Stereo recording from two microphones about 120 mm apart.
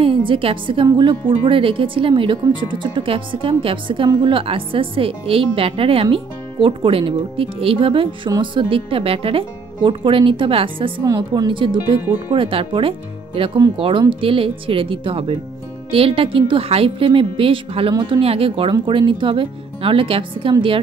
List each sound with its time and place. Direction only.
0.0 s speech: 45° right (ahead or behind)
11.1 s speech: 35° right (ahead or behind)
17.9 s speech: 35° right (ahead or behind)
18.2 s speech: 50° right (ahead or behind)